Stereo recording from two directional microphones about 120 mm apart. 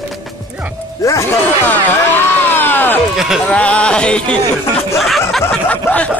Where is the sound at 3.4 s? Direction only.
10° left (ahead or behind).